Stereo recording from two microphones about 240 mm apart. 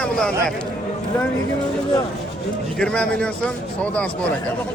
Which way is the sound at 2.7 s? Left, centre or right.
Centre.